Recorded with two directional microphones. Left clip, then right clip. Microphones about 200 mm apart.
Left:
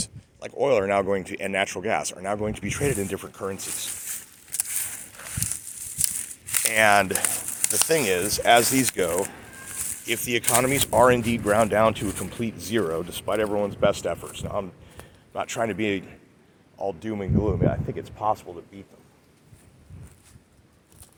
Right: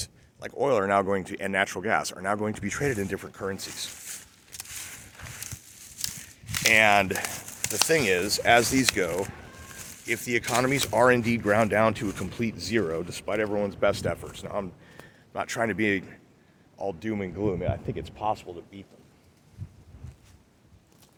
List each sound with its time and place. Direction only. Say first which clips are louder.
0.0 s speech: left 2 dB; 15° right (ahead or behind)
3.7 s a sound: left 3 dB; 50° left (ahead or behind)
6.7 s speech: left 2 dB; 5° right (ahead or behind)
7.1 s speech: left 3 dB; 50° left (ahead or behind)
7.9 s speech: left 1 dB; 10° right (ahead or behind)
9.1 s a sound: left 4 dB; 45° left (ahead or behind)
10.0 s a man's voice: left 1 dB; centre (ahead or behind)